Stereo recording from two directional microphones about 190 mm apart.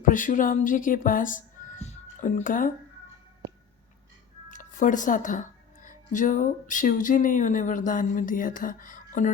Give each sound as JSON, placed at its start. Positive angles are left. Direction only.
{"t": 0.0, "sound": "speech", "side_deg": 45}
{"t": 4.4, "sound": "speech", "side_deg": 45}